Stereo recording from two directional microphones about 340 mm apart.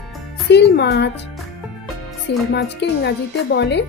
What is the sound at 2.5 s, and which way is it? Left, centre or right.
Speech, left.